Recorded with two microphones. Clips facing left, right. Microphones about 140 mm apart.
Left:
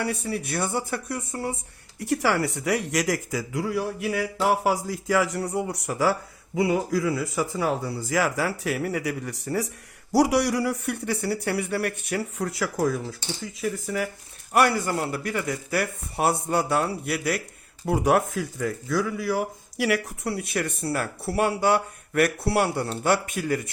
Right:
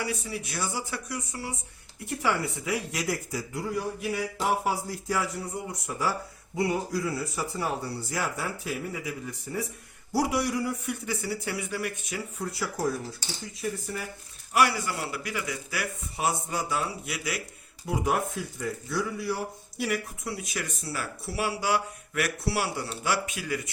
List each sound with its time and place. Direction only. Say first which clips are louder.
0.0 s speech: left 5 dB; 60° left (ahead or behind)
2.0 s speech: left 5 dB; 80° left
14.5 s a man's voice: left 4 dB; 50° left (ahead or behind)
17.8 s speech: left 6 dB; 70° left (ahead or behind); by 18.7 s 90° left
19.7 s a man's voice: left 6 dB; 90° left; by 23.7 s 50° left (ahead or behind)